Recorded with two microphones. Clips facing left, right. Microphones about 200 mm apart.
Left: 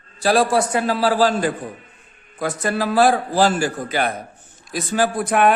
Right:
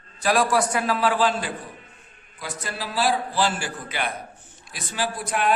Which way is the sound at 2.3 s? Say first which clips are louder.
Left 11 dB; 50° left (ahead or behind).